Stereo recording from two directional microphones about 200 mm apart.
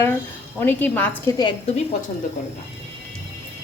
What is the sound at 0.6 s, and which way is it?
Speech, 10° left (ahead or behind).